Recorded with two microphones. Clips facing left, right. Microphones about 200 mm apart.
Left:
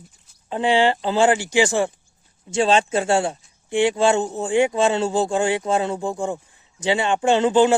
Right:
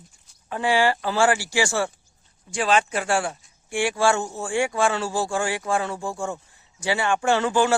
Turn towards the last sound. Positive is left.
turn(degrees=20)  # may be behind; listen again after turning